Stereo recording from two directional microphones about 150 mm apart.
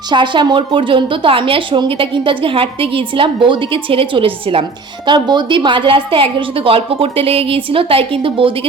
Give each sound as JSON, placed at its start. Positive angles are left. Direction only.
{"t": 0.1, "sound": "a woman's voice", "side_deg": -30}